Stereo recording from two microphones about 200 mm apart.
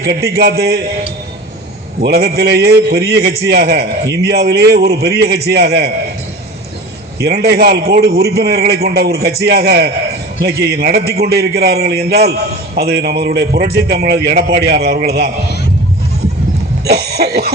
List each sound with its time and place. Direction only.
0.3 s a man's voice: 50° right (ahead or behind)
2.0 s a man's voice: 50° right (ahead or behind)
7.2 s a man's voice: 50° right (ahead or behind)
16.8 s a man's voice: 55° right (ahead or behind)